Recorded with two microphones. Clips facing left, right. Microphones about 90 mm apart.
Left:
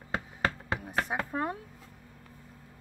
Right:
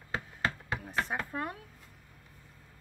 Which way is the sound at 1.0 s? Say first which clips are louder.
Left 4 dB; 20° left (ahead or behind).